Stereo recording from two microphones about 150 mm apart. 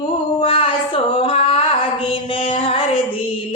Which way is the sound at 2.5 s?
35° left (ahead or behind).